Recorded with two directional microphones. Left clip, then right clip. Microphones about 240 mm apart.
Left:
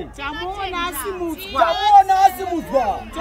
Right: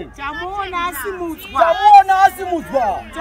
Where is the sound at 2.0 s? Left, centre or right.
Centre.